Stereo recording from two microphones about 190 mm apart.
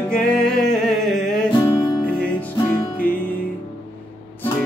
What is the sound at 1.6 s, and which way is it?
Music, 15° left (ahead or behind).